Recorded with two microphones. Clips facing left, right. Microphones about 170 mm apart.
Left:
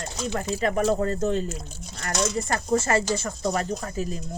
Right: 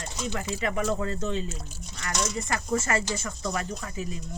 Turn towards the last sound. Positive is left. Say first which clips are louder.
# left 5 dB
turn(degrees=35)  # may be behind; listen again after turning